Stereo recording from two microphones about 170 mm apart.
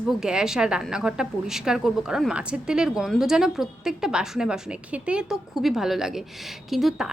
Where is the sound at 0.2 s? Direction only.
5° right (ahead or behind).